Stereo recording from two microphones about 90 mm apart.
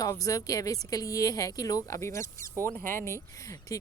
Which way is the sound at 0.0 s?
40° left (ahead or behind).